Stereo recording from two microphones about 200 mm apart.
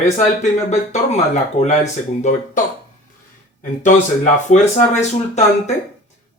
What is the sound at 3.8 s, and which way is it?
Speech, 40° left (ahead or behind).